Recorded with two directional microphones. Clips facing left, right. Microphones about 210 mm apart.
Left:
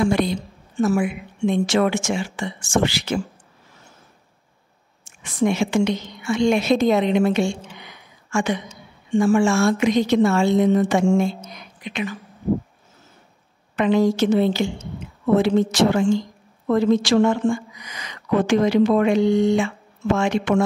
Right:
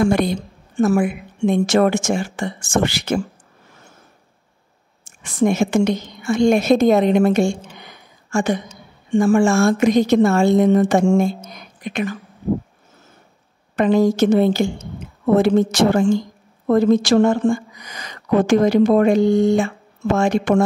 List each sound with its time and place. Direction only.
0.0 s a woman's voice: 50° right (ahead or behind)
5.4 s a woman's voice: 45° right (ahead or behind)
13.7 s a woman's voice: 40° right (ahead or behind)